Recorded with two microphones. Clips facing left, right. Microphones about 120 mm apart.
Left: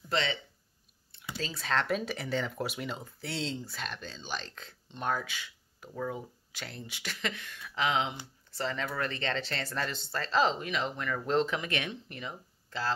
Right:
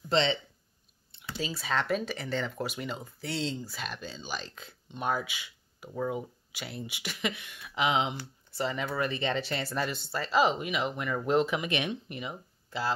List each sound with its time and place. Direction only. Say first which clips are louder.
0.1 s speech: right 5 dB; 25° right (ahead or behind)
1.4 s speech: right 1 dB; 5° right (ahead or behind)